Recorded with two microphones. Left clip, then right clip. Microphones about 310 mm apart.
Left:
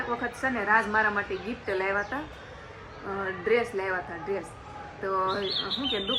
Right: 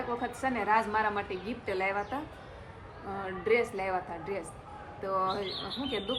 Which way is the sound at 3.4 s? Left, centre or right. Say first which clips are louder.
Left 2 dB; centre.